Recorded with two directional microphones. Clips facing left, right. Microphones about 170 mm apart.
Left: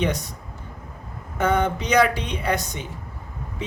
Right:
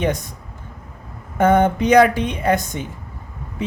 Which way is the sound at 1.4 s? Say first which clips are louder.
Right 6 dB; 50° right (ahead or behind).